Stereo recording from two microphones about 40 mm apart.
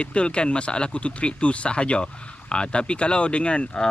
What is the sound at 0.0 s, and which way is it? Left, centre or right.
Speech, left.